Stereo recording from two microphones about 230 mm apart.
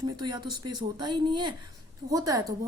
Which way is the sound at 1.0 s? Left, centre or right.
Centre.